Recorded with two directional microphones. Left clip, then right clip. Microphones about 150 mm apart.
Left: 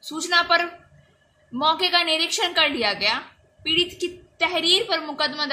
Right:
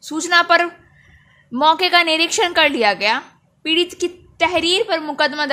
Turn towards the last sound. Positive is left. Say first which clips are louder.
# right 6 dB
turn(degrees=-50)  # may be behind; listen again after turning